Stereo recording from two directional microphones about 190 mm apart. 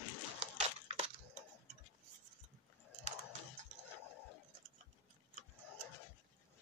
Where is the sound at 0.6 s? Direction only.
35° right (ahead or behind).